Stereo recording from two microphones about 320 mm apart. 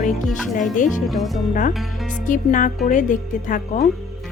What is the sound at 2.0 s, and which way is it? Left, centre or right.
Speech, left.